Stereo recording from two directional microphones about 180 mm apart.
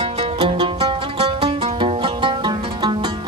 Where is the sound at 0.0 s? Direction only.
30° right (ahead or behind).